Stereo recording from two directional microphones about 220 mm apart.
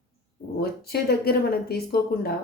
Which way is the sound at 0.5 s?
45° left (ahead or behind).